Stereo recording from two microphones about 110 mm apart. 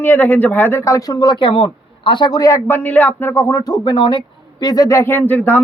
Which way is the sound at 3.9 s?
45° left (ahead or behind).